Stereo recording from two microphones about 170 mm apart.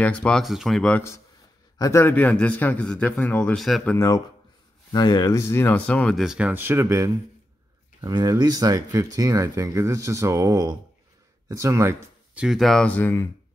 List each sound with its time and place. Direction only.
0.0 s a man's voice: 5° left (ahead or behind)
3.9 s a man's voice: 15° left (ahead or behind); by 12.4 s 15° right (ahead or behind)
12.4 s a man's voice: centre (ahead or behind)